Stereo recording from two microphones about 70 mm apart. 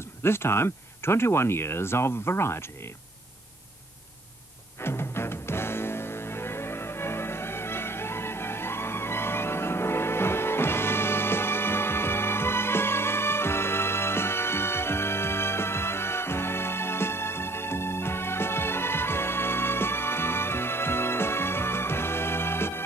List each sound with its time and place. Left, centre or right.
0.2 s speech: left
4.8 s music: left